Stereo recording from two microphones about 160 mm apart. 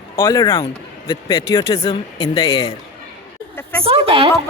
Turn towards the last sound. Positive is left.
turn(degrees=-35)  # may be behind; listen again after turning